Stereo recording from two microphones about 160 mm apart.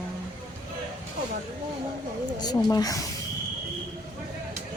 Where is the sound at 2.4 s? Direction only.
25° left (ahead or behind).